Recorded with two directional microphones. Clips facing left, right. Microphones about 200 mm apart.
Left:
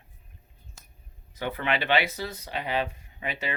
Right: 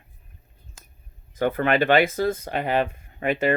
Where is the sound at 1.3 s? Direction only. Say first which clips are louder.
Right 8 dB; 50° right (ahead or behind).